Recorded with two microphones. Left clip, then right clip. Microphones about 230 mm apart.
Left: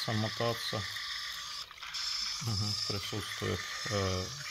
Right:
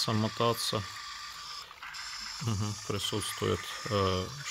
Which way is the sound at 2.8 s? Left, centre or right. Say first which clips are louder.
Right 3 dB; right.